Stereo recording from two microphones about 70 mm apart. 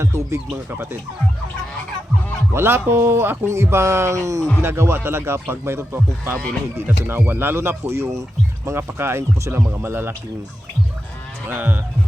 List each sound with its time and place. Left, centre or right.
0.0 s speech: right
2.5 s speech: right
4.6 s speech: right
11.5 s honk: right